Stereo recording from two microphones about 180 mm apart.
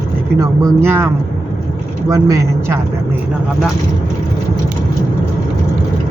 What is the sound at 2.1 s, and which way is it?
Speech, 20° right (ahead or behind).